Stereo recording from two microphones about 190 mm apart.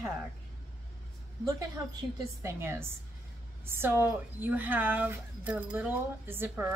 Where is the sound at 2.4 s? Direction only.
15° right (ahead or behind).